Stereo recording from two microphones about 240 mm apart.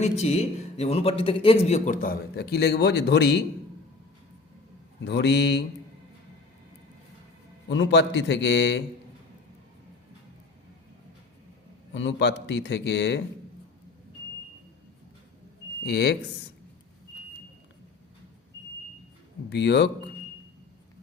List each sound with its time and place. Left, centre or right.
0.0 s a man's voice: left
5.0 s speech: left
7.7 s speech: left
11.9 s speech: left
15.8 s speech: left
19.5 s speech: left